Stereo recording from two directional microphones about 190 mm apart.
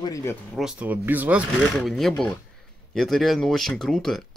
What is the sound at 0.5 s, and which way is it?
Speech, 5° right (ahead or behind).